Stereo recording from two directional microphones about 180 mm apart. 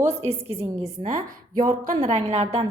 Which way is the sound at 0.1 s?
35° right (ahead or behind).